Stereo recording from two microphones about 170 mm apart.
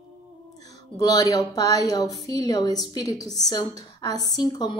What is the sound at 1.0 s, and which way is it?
A woman's voice, 20° left (ahead or behind).